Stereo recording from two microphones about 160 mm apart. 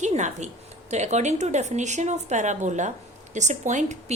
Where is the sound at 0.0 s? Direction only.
45° right (ahead or behind).